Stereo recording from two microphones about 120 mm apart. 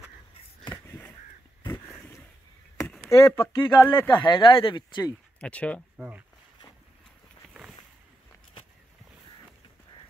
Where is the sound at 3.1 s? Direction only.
25° left (ahead or behind).